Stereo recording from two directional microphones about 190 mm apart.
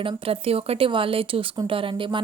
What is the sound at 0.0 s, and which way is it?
Speech, 30° right (ahead or behind).